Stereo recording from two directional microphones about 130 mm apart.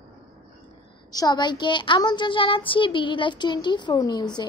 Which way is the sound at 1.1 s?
30° left (ahead or behind).